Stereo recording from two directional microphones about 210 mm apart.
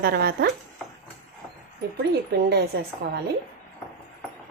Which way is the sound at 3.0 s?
50° right (ahead or behind).